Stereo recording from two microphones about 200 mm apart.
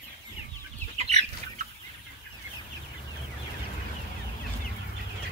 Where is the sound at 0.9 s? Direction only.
35° right (ahead or behind).